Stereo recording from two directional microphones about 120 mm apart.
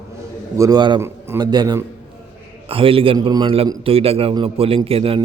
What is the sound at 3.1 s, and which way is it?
A man's voice, 35° right (ahead or behind).